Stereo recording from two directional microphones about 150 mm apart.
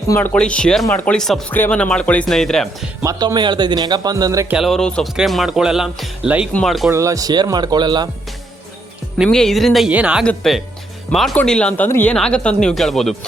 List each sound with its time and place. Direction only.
0.1 s speech: 15° left (ahead or behind)
3.0 s a man's voice: 25° right (ahead or behind)
4.4 s speech: 5° right (ahead or behind)
6.9 s a man's voice: 20° right (ahead or behind)
9.1 s speech: centre (ahead or behind)